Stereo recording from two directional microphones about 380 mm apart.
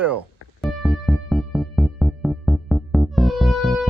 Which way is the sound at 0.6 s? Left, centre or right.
Centre.